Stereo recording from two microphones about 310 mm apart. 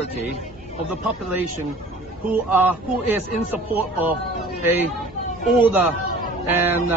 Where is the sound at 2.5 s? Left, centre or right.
Centre.